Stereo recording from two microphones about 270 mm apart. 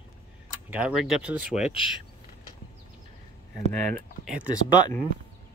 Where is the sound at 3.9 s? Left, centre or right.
Centre.